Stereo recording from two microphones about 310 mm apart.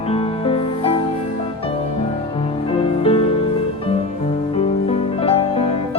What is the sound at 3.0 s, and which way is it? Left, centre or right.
Music, centre.